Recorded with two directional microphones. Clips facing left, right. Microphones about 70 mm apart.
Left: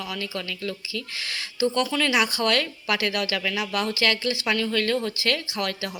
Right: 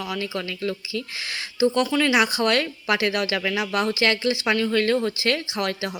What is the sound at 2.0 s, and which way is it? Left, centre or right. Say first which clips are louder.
A woman's voice: right 3 dB; centre.